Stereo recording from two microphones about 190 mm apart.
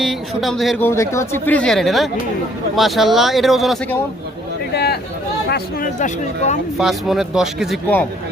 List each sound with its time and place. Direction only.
0.0 s speech: centre (ahead or behind)
0.9 s speech: 15° left (ahead or behind)
4.7 s a sound: 60° left (ahead or behind)
5.5 s speech: 55° left (ahead or behind)
6.0 s speech: 40° left (ahead or behind)
6.7 s speech: centre (ahead or behind)